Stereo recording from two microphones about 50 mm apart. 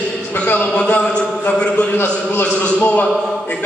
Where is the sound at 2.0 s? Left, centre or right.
Left.